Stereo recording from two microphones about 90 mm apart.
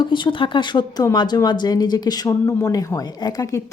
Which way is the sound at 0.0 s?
60° left (ahead or behind).